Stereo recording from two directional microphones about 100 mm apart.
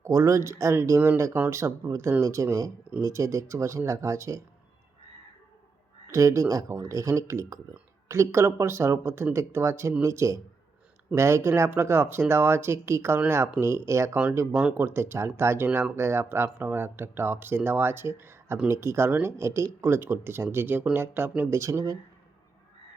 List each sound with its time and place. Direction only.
0.0 s speech: 30° right (ahead or behind)
6.1 s speech: 30° right (ahead or behind)